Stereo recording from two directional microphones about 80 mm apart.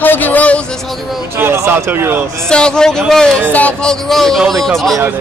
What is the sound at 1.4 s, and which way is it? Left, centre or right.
Speech, right.